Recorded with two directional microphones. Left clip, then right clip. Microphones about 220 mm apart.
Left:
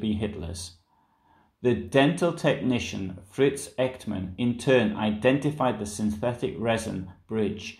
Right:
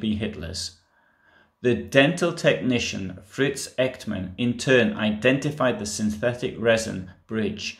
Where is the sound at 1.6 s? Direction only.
10° right (ahead or behind).